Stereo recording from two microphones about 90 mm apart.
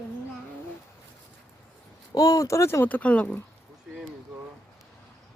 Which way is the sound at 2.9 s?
15° left (ahead or behind).